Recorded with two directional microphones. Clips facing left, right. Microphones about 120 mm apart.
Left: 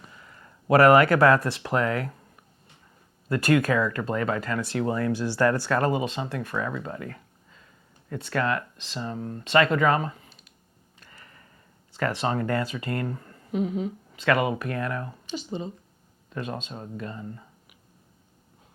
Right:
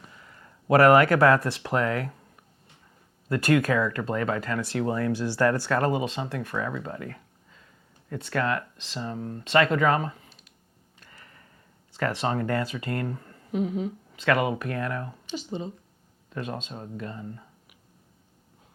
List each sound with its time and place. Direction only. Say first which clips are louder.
0.0 s speech: left 1 dB; 20° left (ahead or behind)
3.2 s speech: left 1 dB; 15° left (ahead or behind)
9.0 s speech: even; 20° left (ahead or behind)
11.9 s speech: left 1 dB; 10° left (ahead or behind)